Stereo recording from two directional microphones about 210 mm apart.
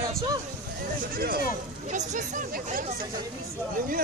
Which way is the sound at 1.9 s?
35° right (ahead or behind).